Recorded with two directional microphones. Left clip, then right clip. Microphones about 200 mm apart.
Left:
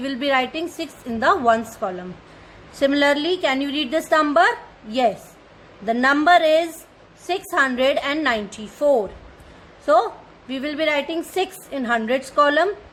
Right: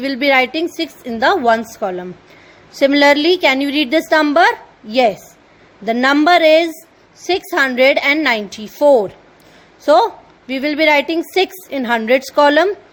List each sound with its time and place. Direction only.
0.0 s a woman's voice: 25° right (ahead or behind)